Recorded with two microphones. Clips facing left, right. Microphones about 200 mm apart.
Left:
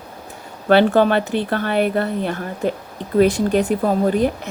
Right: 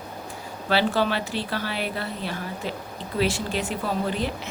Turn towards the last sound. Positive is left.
turn(degrees=50)  # may be behind; listen again after turning